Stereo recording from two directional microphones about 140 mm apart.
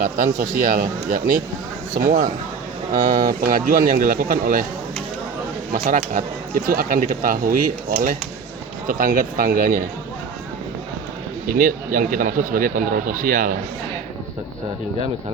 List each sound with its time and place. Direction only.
0.0 s speech: 90° right
3.0 s speech: 70° right (ahead or behind); by 4.6 s 85° right
5.7 s speech: 85° right
6.7 s speech: 90° right
11.4 s speech: 80° right